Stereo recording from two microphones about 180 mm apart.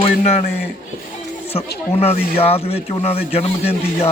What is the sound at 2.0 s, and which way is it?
A man's voice, 35° left (ahead or behind).